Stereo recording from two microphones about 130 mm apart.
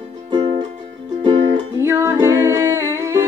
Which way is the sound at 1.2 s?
40° right (ahead or behind).